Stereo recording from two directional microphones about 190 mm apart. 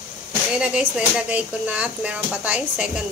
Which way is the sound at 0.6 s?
5° right (ahead or behind).